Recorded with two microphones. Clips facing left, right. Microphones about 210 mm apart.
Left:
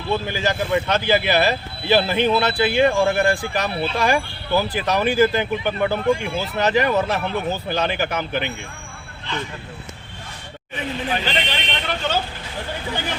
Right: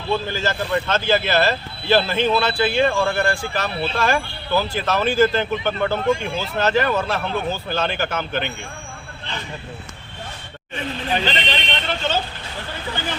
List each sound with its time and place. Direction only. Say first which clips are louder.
0.1 s speech: even; 15° left (ahead or behind)
11.3 s speech: right 1 dB; 10° left (ahead or behind)